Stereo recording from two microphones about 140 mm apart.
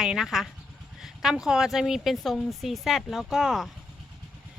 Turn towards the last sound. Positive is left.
turn(degrees=0)  # may be behind; listen again after turning